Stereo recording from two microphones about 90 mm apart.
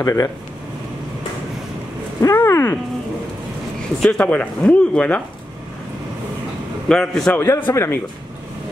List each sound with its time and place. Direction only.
0.0 s speech: 35° left (ahead or behind)
2.3 s a man's voice: 25° left (ahead or behind)
4.0 s speech: 10° left (ahead or behind)
6.9 s speech: 5° left (ahead or behind)
7.3 s a man's voice: 25° left (ahead or behind)